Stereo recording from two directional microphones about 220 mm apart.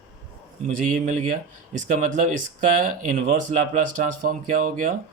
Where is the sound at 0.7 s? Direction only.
35° right (ahead or behind).